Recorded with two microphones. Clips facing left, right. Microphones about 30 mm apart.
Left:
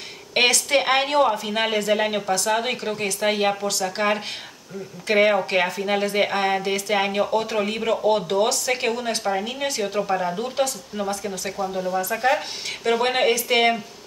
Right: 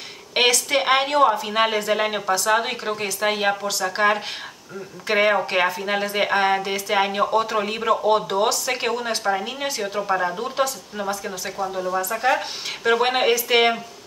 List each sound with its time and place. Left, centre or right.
0.3 s speech: centre